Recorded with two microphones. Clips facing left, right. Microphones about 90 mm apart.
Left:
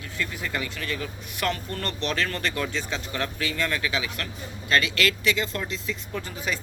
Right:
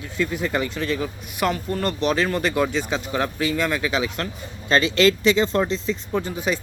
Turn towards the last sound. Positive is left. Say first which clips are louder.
# right 7 dB
turn(degrees=-20)  # may be behind; listen again after turning